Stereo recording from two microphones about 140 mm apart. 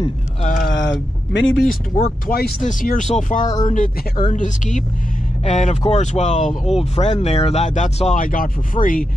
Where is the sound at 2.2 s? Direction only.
90° left; by 4.2 s 70° left (ahead or behind).